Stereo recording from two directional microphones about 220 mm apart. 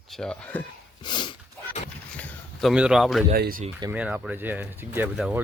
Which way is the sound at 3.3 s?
40° right (ahead or behind).